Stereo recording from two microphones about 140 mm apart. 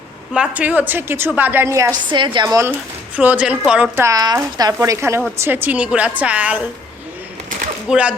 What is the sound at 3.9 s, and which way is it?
A woman's voice, 20° right (ahead or behind).